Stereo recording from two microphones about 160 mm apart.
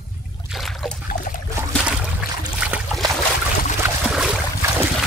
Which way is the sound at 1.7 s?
5° right (ahead or behind).